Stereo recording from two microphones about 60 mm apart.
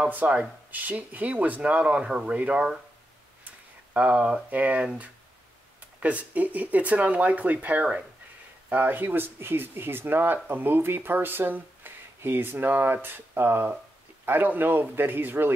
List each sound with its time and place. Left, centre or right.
0.1 s speech: right